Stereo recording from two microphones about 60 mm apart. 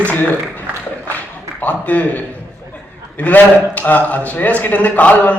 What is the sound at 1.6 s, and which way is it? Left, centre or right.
Speech, left.